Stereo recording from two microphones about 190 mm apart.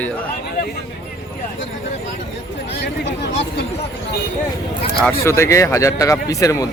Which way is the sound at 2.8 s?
65° left (ahead or behind).